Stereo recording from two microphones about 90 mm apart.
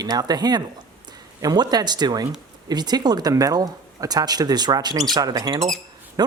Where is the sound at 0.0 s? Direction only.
45° right (ahead or behind).